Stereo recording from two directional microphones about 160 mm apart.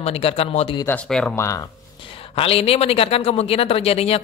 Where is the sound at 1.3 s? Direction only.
20° left (ahead or behind).